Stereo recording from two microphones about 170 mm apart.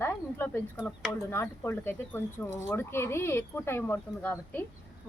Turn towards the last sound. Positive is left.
turn(degrees=10)  # may be behind; listen again after turning